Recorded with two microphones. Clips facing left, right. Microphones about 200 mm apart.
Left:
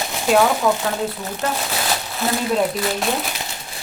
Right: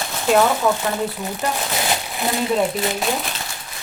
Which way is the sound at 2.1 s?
15° right (ahead or behind).